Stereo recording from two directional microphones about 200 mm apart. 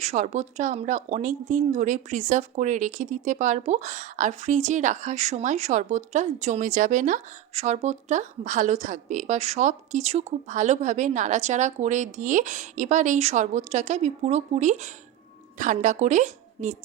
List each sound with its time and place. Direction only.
0.0 s a woman's voice: 35° right (ahead or behind)